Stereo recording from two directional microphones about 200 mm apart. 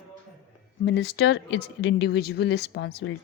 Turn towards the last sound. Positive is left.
turn(degrees=55)  # may be behind; listen again after turning